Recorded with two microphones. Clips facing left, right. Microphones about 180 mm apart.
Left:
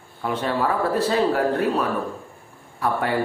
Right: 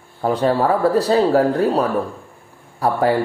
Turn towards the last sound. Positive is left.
turn(degrees=-35)  # may be behind; listen again after turning